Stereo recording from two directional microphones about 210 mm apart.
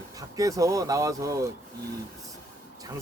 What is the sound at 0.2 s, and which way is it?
Speech, 15° right (ahead or behind).